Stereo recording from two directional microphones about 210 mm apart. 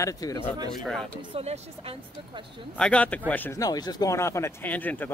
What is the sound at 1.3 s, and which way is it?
Speech, 30° right (ahead or behind).